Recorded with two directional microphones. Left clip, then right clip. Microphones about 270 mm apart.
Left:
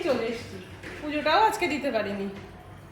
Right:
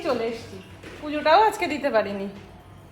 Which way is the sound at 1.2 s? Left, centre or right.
Centre.